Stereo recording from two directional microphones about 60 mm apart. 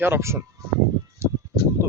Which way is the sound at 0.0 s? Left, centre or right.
Right.